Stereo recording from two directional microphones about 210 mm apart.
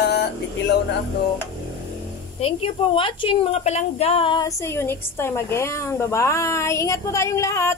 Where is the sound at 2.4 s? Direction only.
25° left (ahead or behind).